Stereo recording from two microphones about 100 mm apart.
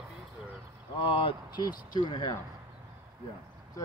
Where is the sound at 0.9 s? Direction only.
60° left (ahead or behind).